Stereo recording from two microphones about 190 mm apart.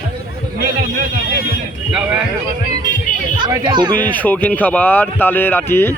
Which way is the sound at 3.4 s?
25° right (ahead or behind).